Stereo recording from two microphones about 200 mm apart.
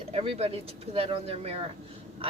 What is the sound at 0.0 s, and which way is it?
A woman's voice, 30° right (ahead or behind).